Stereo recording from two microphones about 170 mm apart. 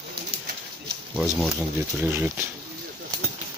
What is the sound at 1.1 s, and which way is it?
Speech, 5° right (ahead or behind).